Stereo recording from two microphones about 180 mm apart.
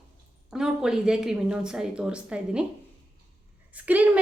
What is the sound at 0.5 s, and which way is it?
Speech, 5° right (ahead or behind).